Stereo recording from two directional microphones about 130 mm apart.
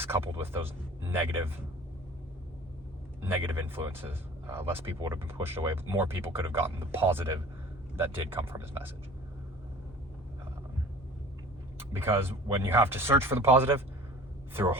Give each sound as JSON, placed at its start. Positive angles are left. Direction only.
{"t": 0.0, "sound": "speech", "side_deg": -15}
{"t": 3.2, "sound": "speech", "side_deg": -15}
{"t": 11.8, "sound": "speech", "side_deg": -20}